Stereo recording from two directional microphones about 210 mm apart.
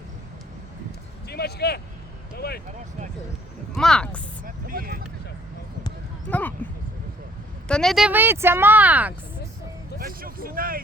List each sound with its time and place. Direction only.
1.3 s speech: 50° left (ahead or behind)
2.3 s a sound: 50° left (ahead or behind)
3.8 s speech: 5° left (ahead or behind)
4.4 s a sound: 45° right (ahead or behind)
6.3 s speech: 10° left (ahead or behind)
7.7 s speech: centre (ahead or behind)
10.0 s vehicle: 45° right (ahead or behind)